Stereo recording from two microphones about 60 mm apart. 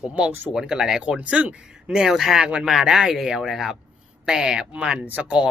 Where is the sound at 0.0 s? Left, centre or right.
Right.